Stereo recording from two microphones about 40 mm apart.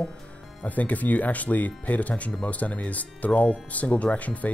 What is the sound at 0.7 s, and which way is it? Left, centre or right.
Speech, left.